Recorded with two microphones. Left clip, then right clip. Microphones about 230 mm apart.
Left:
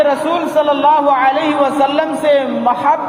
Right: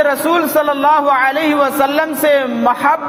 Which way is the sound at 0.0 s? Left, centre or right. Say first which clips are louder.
Even; right.